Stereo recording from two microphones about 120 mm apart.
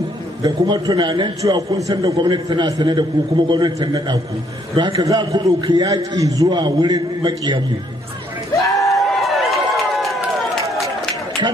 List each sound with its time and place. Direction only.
0.4 s a man's voice: 35° right (ahead or behind)
8.6 s a sound: 25° left (ahead or behind)
8.9 s run: centre (ahead or behind)